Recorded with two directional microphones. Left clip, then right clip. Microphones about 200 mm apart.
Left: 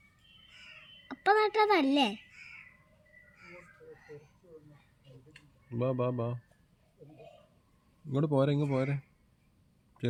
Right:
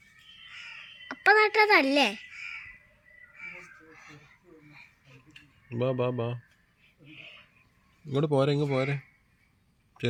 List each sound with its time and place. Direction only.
1.0 s a child's voice: 20° left (ahead or behind)
5.7 s speech: 20° right (ahead or behind)
8.1 s speech: 15° right (ahead or behind)